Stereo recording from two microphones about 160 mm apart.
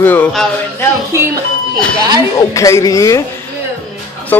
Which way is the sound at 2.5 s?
20° left (ahead or behind).